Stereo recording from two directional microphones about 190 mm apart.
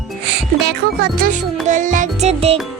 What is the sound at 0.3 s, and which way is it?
Music, 60° right (ahead or behind).